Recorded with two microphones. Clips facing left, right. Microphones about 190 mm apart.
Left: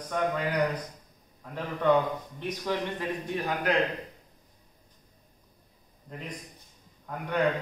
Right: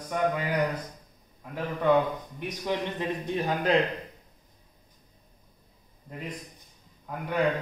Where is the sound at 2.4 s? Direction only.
20° right (ahead or behind).